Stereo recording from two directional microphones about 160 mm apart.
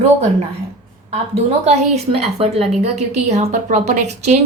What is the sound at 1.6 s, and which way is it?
A woman's voice, 40° right (ahead or behind).